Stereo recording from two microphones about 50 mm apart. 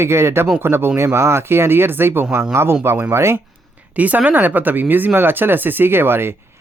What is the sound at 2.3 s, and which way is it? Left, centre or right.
Speech, right.